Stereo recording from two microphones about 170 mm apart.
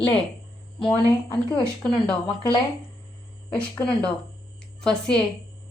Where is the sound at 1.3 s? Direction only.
25° left (ahead or behind).